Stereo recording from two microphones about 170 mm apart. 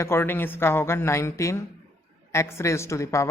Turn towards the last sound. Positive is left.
turn(degrees=15)  # may be behind; listen again after turning